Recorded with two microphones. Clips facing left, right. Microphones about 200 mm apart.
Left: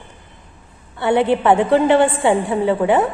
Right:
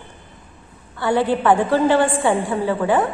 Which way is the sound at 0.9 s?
25° left (ahead or behind).